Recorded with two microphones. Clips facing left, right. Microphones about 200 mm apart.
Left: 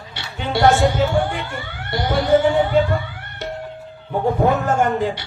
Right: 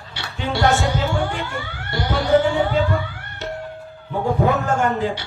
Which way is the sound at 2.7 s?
50° left (ahead or behind).